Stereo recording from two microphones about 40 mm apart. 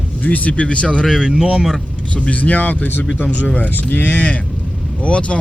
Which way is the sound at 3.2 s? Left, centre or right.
Left.